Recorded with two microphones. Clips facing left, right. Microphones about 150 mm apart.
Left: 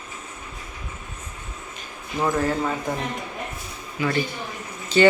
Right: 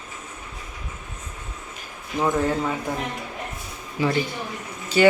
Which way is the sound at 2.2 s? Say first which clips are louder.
Right 1 dB; 20° right (ahead or behind).